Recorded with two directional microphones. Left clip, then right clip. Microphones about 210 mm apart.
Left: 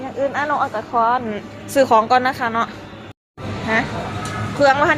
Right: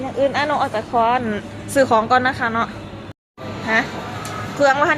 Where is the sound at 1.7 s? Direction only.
10° left (ahead or behind).